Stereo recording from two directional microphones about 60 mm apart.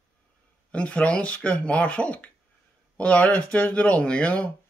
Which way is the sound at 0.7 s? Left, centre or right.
Left.